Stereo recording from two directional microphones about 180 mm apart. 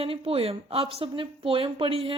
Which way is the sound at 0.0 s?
35° right (ahead or behind).